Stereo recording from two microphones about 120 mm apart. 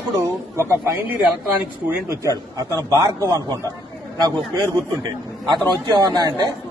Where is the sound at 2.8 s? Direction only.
30° right (ahead or behind).